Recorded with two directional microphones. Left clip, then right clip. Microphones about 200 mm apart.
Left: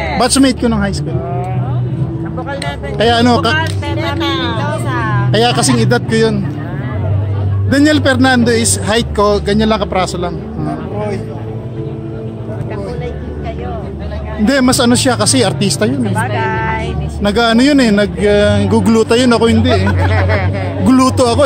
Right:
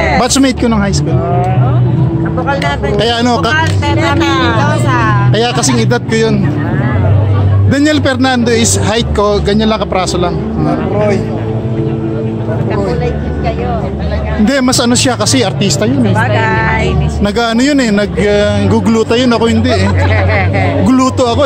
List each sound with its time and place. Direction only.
0.2 s a man's voice: 5° left (ahead or behind)
3.0 s a man's voice: centre (ahead or behind)
4.2 s music: 10° right (ahead or behind)
4.6 s a man's voice: centre (ahead or behind)
7.7 s a man's voice: centre (ahead or behind)
14.4 s a man's voice: 5° left (ahead or behind)
16.2 s speech: 30° left (ahead or behind)
17.2 s speech: 5° left (ahead or behind)
19.5 s a man's voice: centre (ahead or behind)
20.2 s music: 50° left (ahead or behind)
20.8 s speech: 10° left (ahead or behind)